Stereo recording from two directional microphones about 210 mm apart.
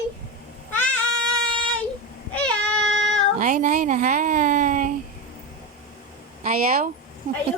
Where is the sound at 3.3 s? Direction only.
35° right (ahead or behind).